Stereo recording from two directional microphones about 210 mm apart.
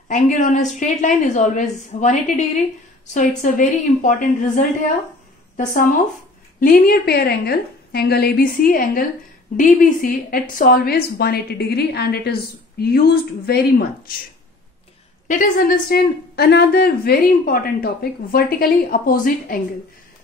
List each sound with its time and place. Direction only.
0.1 s a woman's voice: 35° left (ahead or behind)
5.7 s a woman's voice: 40° left (ahead or behind)
15.2 s speech: 40° left (ahead or behind)